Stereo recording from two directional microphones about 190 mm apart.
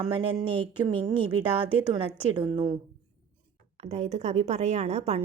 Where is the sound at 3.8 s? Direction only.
35° right (ahead or behind).